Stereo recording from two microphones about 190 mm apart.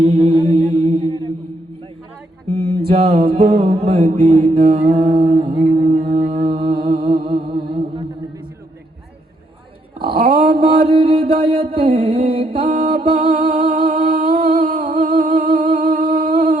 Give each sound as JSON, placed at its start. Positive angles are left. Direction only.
{"t": 0.0, "sound": "mantra", "side_deg": -30}
{"t": 2.5, "sound": "music", "side_deg": -30}
{"t": 3.2, "sound": "a sound", "side_deg": -55}
{"t": 3.4, "sound": "music", "side_deg": -30}
{"t": 5.2, "sound": "mantra", "side_deg": -35}
{"t": 6.8, "sound": "music", "side_deg": -30}
{"t": 10.2, "sound": "a sound", "side_deg": -55}
{"t": 10.8, "sound": "music", "side_deg": -30}
{"t": 14.4, "sound": "humming", "side_deg": -55}
{"t": 14.9, "sound": "music", "side_deg": -55}
{"t": 15.5, "sound": "humming", "side_deg": -55}